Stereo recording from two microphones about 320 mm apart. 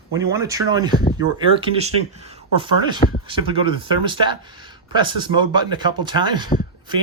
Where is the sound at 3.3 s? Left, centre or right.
Centre.